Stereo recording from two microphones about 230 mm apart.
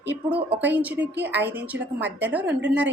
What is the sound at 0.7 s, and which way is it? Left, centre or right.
A woman's voice, centre.